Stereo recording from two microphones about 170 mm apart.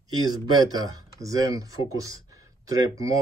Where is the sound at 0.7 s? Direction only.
20° right (ahead or behind).